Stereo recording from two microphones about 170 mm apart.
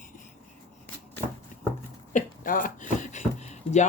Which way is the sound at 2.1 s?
50° left (ahead or behind).